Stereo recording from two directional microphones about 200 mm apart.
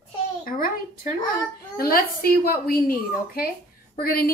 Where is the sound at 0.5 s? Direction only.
45° left (ahead or behind).